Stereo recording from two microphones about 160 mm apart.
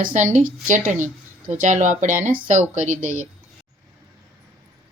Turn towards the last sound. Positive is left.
turn(degrees=-50)  # may be behind; listen again after turning